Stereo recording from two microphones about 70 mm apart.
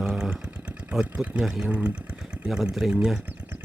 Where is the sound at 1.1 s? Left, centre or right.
Right.